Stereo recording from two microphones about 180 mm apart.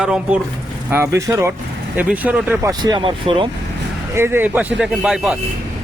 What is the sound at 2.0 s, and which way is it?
Speech, 5° right (ahead or behind).